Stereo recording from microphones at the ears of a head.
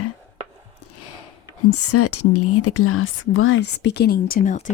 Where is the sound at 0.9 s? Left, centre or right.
Left.